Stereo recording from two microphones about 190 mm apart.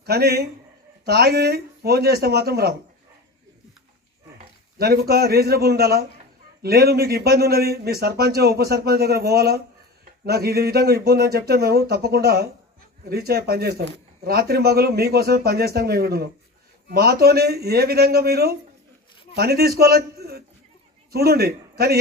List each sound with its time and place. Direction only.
0.0 s a man's voice: 55° right (ahead or behind)
4.8 s a man's voice: 55° right (ahead or behind)